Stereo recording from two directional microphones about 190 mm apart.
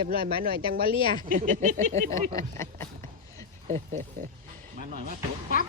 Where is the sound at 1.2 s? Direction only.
45° right (ahead or behind).